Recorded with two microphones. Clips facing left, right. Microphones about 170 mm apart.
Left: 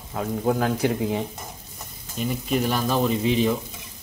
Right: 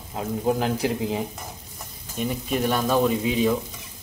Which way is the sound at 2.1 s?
Centre (ahead or behind).